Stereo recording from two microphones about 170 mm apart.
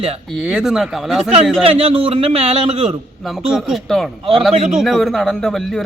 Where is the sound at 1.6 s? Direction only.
35° right (ahead or behind).